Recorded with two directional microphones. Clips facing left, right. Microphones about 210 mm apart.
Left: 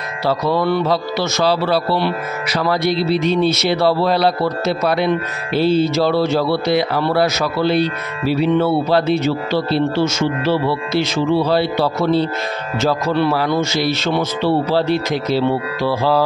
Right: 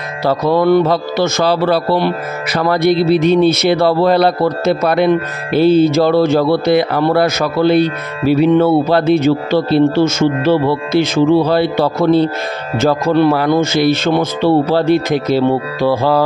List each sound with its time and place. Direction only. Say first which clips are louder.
0.2 s speech: right 4 dB; 50° right (ahead or behind)